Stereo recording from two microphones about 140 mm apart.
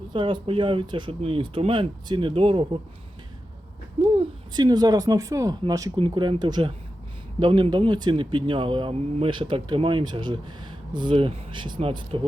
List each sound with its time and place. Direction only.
0.1 s speech: 35° right (ahead or behind)
4.2 s speech: 30° right (ahead or behind)